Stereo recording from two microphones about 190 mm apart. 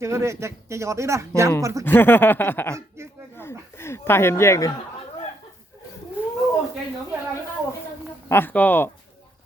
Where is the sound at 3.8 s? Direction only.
15° left (ahead or behind).